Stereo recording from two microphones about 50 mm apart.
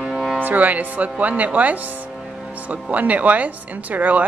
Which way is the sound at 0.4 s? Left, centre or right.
Right.